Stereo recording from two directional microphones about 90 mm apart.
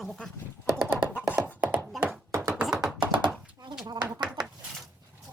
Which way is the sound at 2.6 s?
5° right (ahead or behind).